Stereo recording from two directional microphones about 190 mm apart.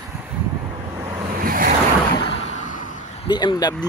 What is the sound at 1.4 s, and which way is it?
Waves, 50° right (ahead or behind).